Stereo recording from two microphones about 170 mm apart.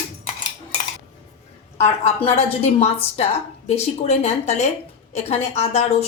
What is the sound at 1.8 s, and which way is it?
A woman's voice, 40° left (ahead or behind).